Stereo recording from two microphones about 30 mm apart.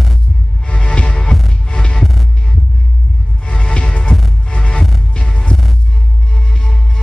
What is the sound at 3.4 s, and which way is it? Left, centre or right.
Music, left.